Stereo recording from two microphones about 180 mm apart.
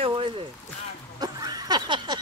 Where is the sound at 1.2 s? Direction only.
20° right (ahead or behind).